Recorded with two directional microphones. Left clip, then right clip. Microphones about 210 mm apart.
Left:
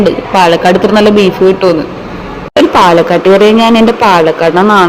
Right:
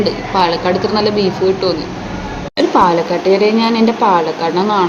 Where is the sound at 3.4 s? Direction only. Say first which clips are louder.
Left 7 dB; 25° left (ahead or behind).